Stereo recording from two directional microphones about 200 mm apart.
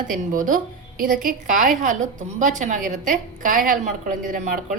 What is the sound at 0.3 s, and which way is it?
A woman's voice, 40° right (ahead or behind).